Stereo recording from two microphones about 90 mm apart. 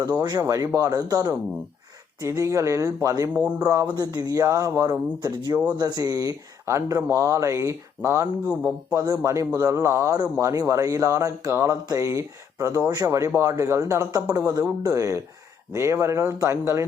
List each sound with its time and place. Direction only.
0.0 s a man's voice: 45° right (ahead or behind)
11.5 s a sound: 30° right (ahead or behind)
11.9 s a man's voice: 35° right (ahead or behind)